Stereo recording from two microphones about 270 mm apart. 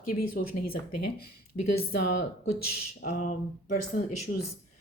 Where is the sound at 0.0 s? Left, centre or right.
Left.